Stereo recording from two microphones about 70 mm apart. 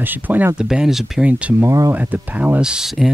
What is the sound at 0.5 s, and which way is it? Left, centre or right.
Speech, centre.